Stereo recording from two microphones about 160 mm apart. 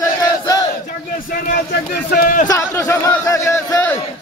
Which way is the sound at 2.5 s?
20° left (ahead or behind).